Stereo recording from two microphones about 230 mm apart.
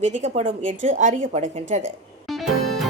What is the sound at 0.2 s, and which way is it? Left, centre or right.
A woman's voice, right.